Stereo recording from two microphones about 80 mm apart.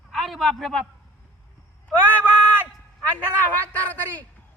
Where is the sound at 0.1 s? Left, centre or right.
Centre.